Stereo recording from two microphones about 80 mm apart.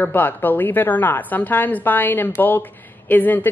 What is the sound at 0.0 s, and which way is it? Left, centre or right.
A woman's voice, left.